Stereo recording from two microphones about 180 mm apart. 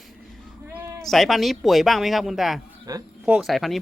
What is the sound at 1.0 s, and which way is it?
Speech, centre (ahead or behind).